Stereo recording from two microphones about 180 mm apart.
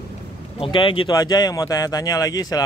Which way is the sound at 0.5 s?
30° left (ahead or behind).